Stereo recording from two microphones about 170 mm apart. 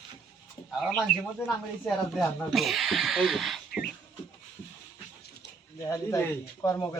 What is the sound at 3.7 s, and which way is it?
Music, 65° left (ahead or behind).